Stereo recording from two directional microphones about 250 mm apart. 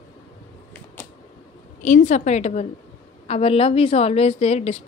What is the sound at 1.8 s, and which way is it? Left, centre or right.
Speech, left.